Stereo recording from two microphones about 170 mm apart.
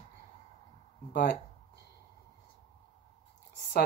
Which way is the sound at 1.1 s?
80° left.